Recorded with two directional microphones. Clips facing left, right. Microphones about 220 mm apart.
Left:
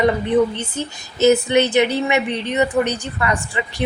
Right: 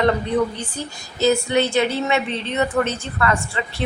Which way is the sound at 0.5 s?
20° left (ahead or behind).